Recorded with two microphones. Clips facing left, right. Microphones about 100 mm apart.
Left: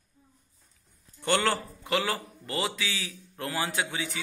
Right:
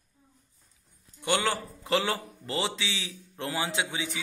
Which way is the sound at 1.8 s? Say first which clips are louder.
Right 2 dB; 30° right (ahead or behind).